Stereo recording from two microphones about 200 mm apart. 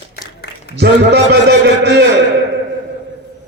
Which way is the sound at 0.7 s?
55° right (ahead or behind).